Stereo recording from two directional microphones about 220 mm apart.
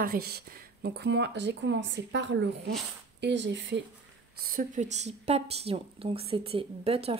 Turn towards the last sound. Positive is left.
turn(degrees=-25)  # may be behind; listen again after turning